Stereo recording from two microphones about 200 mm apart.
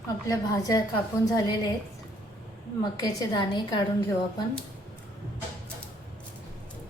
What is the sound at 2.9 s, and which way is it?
Speech, 20° left (ahead or behind).